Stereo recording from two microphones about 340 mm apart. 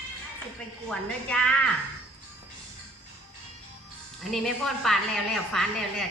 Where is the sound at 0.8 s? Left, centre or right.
Centre.